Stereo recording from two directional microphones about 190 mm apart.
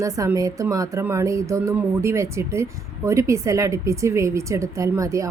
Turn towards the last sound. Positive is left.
turn(degrees=-15)  # may be behind; listen again after turning